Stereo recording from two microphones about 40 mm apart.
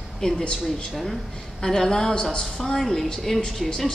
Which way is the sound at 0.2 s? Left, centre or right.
Centre.